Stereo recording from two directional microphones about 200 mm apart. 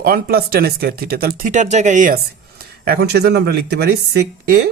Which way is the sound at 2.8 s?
50° right (ahead or behind).